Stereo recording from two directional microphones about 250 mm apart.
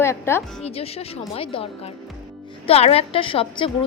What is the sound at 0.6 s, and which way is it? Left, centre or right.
Speech, left.